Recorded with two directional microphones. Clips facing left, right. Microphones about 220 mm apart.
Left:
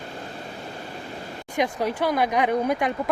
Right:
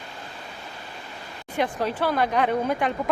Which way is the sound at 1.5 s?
15° left (ahead or behind).